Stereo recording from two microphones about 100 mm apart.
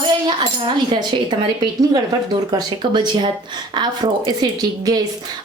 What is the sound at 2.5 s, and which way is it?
A woman's voice, 45° right (ahead or behind).